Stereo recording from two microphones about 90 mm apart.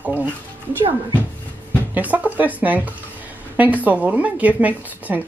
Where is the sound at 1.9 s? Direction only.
20° right (ahead or behind).